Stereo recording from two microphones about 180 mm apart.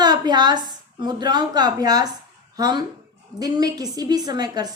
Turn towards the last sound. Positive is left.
turn(degrees=-20)  # may be behind; listen again after turning